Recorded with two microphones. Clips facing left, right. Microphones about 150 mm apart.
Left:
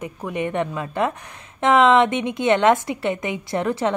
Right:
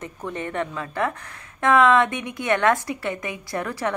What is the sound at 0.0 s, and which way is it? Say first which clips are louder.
A woman's voice: left 5 dB; 10° left (ahead or behind).